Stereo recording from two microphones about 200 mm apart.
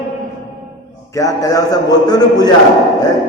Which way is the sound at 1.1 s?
15° left (ahead or behind).